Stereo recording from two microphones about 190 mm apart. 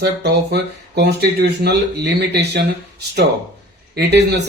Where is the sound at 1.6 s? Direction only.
60° right (ahead or behind).